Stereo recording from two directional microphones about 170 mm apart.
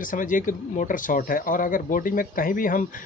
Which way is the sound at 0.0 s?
50° left (ahead or behind).